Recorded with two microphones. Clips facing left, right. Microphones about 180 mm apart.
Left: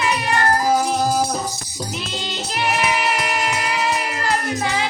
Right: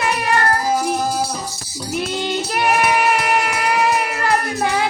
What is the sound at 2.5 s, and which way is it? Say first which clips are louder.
Child singing: right 3 dB; 50° right (ahead or behind).